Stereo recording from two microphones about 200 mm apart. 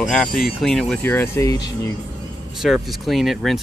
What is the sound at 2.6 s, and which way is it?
Speech, centre (ahead or behind).